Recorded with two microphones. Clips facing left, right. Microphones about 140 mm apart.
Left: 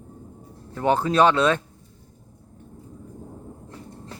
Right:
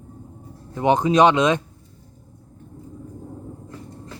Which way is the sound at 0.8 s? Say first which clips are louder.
Right 3 dB; 15° right (ahead or behind).